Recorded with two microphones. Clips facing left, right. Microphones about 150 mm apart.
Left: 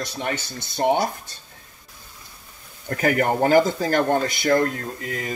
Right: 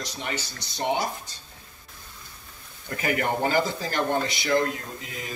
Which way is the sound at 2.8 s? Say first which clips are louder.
Left 6 dB; 45° left (ahead or behind).